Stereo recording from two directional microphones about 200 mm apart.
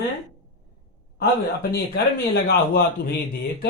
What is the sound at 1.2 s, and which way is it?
Speech, 55° left (ahead or behind).